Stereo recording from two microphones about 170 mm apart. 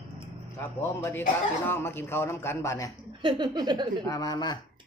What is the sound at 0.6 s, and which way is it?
Speech, 15° left (ahead or behind).